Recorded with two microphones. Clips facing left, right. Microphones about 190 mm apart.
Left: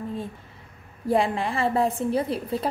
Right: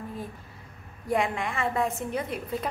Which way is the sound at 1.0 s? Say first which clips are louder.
Left 4 dB; 30° left (ahead or behind).